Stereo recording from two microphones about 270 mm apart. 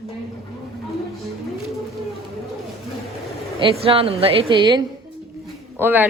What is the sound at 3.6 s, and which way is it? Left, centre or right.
A woman's voice, right.